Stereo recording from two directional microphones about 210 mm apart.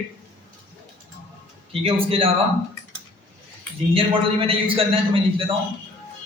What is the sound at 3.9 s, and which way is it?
A man's voice, 25° right (ahead or behind).